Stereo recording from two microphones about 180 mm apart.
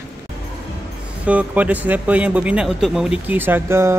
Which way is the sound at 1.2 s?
10° right (ahead or behind).